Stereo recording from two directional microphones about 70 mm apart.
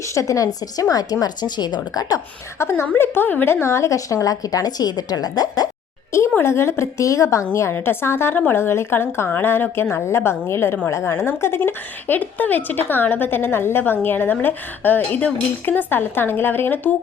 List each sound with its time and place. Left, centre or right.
0.1 s a woman's voice: left
2.6 s a woman's voice: left
6.3 s a woman's voice: left